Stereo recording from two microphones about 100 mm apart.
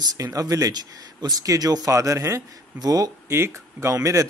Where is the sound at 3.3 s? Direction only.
25° right (ahead or behind).